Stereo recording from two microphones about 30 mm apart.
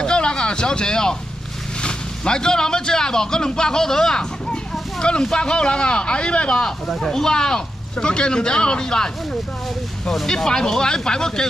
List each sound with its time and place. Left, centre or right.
0.0 s a sound: left
1.8 s speech: left
7.0 s speech: centre
10.2 s speech: centre